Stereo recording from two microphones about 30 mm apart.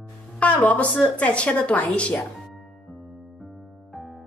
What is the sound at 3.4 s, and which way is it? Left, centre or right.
Music, centre.